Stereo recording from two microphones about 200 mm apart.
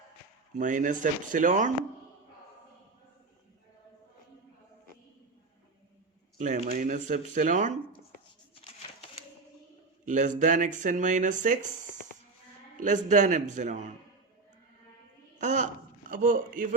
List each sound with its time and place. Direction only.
0.6 s speech: 40° right (ahead or behind)
6.4 s speech: 40° right (ahead or behind)
10.1 s speech: 40° right (ahead or behind)
12.7 s speech: 40° right (ahead or behind)
15.4 s a man's voice: 35° right (ahead or behind)